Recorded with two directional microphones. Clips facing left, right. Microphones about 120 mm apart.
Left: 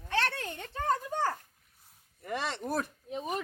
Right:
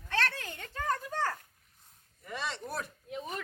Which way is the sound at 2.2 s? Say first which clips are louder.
Left 4 dB; 55° left (ahead or behind).